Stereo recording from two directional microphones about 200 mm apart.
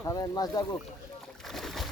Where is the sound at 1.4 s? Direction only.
Centre (ahead or behind).